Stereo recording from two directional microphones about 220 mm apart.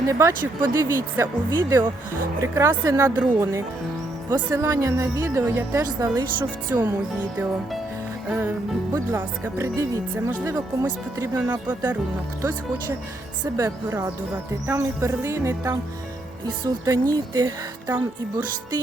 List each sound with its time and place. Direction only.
0.0 s speech: 15° right (ahead or behind)
13.4 s speech: 15° right (ahead or behind)